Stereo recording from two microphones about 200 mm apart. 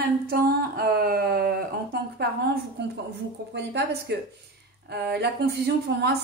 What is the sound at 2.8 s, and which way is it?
A woman's voice, 60° right (ahead or behind).